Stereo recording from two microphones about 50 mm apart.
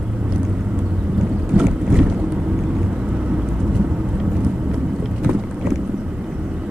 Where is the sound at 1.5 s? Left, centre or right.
Centre.